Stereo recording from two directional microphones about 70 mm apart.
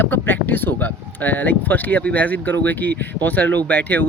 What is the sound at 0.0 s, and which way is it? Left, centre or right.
Speech, left.